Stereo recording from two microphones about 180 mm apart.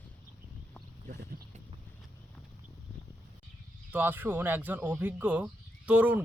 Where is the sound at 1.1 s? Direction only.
45° right (ahead or behind).